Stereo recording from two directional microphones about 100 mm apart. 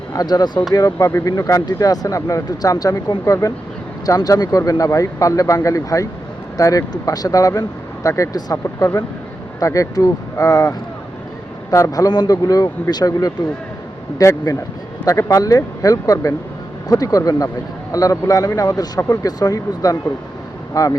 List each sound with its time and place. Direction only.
0.1 s speech: 40° left (ahead or behind)
0.7 s speech: 35° left (ahead or behind)
18.9 s speech: 30° left (ahead or behind)